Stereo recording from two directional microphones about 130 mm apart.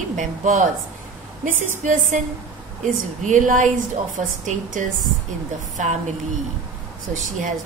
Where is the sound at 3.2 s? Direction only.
75° right (ahead or behind).